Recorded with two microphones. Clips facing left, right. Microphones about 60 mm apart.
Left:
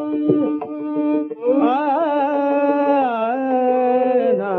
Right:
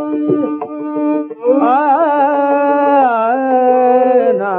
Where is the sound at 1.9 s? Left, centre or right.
Right.